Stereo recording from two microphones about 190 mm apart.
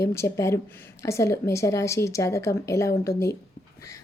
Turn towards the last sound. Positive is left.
turn(degrees=15)  # may be behind; listen again after turning